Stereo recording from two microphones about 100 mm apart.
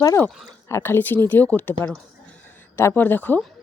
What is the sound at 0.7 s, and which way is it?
A woman's voice, 25° left (ahead or behind).